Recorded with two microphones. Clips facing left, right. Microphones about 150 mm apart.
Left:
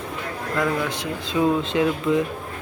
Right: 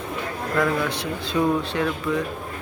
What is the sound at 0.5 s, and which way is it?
Speech, 5° left (ahead or behind).